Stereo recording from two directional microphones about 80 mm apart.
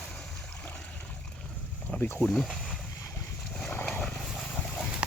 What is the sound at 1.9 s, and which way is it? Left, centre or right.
Speech, left.